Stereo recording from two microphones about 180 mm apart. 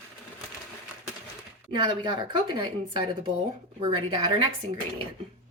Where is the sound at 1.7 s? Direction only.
30° right (ahead or behind).